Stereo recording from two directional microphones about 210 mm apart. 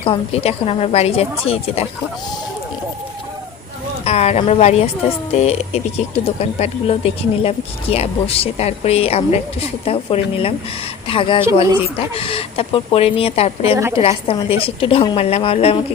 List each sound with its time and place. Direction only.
0.0 s speech: 30° left (ahead or behind)
4.0 s a woman's voice: 30° left (ahead or behind)